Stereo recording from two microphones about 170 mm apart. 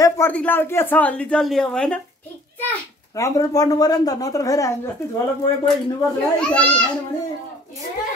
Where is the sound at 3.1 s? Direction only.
20° left (ahead or behind).